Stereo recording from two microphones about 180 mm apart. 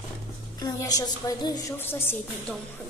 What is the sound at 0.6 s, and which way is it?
A woman's voice, 20° left (ahead or behind).